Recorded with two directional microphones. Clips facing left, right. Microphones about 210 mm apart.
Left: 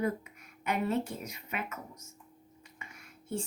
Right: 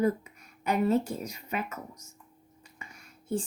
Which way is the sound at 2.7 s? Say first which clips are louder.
Right 2 dB; 35° right (ahead or behind).